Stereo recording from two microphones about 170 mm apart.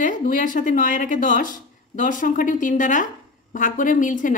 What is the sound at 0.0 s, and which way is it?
A woman's voice, 55° left (ahead or behind).